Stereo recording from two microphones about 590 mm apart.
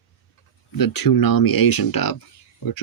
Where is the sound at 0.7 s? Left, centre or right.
Left.